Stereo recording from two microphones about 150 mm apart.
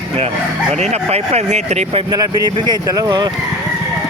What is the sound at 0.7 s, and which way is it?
Speech, 45° right (ahead or behind).